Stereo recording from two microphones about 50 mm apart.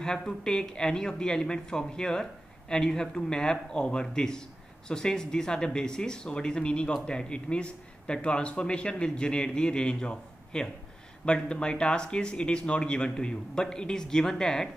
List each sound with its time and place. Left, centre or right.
0.0 s speech: centre